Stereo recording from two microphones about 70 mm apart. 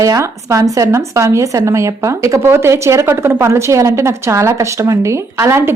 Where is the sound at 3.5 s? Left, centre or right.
Right.